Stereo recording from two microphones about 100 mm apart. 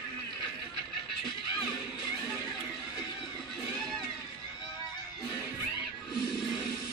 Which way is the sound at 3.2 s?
Centre (ahead or behind).